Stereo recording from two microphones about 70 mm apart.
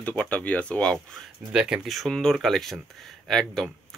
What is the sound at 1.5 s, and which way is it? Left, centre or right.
Speech, centre.